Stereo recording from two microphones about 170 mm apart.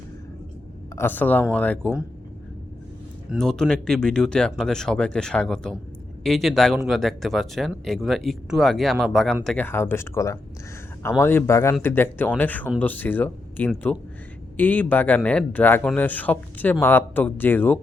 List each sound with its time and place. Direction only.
0.9 s a man's voice: 10° left (ahead or behind)
3.2 s a man's voice: 5° left (ahead or behind)